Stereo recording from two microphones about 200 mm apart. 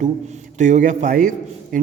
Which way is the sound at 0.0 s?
35° right (ahead or behind).